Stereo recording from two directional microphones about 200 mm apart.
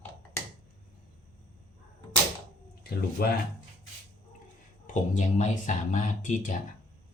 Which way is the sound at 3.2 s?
50° left (ahead or behind).